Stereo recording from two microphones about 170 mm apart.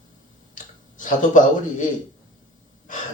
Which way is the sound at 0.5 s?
50° left (ahead or behind).